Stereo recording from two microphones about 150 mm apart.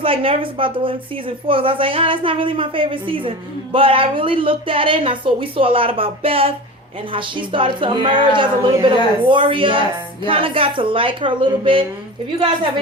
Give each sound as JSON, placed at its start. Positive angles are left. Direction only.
{"t": 0.0, "sound": "a woman's voice", "side_deg": -35}